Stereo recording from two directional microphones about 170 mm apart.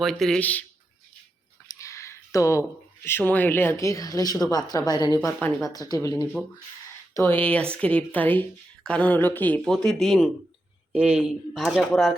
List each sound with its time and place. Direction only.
0.0 s speech: centre (ahead or behind)
1.6 s a woman's voice: 15° left (ahead or behind); by 12.1 s centre (ahead or behind)